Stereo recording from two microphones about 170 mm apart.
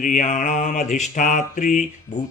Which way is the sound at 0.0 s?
45° left (ahead or behind).